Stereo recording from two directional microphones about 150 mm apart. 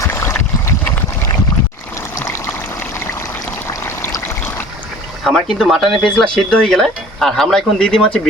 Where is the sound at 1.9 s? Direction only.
20° left (ahead or behind).